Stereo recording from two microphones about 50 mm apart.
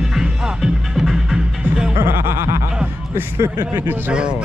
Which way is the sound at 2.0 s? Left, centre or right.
Right.